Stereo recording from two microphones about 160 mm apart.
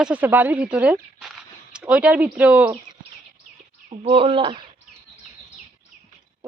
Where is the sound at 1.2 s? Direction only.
5° right (ahead or behind).